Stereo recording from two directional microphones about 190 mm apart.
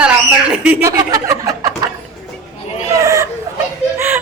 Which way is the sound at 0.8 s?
15° right (ahead or behind).